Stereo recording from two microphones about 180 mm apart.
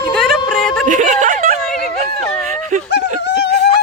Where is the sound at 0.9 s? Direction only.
45° right (ahead or behind).